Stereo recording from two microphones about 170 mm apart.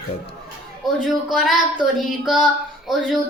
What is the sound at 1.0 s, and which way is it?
A child's voice, centre (ahead or behind).